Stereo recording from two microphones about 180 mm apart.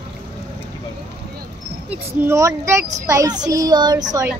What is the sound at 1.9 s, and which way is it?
A woman's voice, 15° right (ahead or behind).